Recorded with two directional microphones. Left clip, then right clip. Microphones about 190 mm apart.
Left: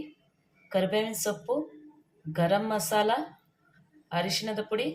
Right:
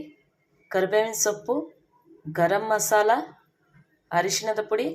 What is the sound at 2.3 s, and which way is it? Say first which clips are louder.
Speech: right 5 dB; 20° right (ahead or behind).